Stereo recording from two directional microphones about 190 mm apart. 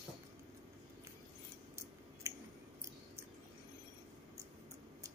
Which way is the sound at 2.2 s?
15° right (ahead or behind).